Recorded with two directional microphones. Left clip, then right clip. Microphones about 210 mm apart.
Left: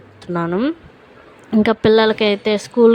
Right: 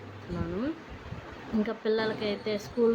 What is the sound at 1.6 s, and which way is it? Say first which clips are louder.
Speech: left 17 dB; 50° left (ahead or behind).